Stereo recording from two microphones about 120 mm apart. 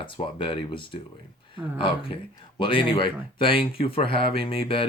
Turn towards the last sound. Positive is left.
turn(degrees=45)  # may be behind; listen again after turning